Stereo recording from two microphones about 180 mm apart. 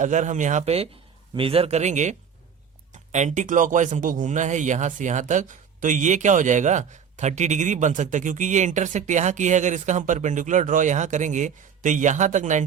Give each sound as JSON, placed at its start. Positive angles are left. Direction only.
{"t": 0.0, "sound": "a man's voice", "side_deg": -45}